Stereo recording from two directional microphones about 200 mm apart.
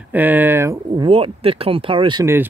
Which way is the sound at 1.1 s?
30° right (ahead or behind).